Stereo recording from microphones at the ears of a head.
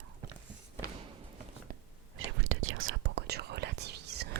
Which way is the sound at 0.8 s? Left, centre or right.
Right.